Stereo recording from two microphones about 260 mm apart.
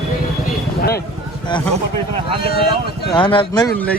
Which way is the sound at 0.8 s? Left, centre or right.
Left.